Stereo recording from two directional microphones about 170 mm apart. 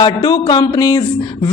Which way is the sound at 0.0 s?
25° left (ahead or behind).